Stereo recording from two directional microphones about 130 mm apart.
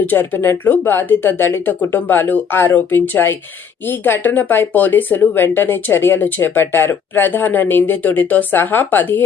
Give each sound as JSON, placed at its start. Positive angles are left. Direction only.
{"t": 0.0, "sound": "speech", "side_deg": 15}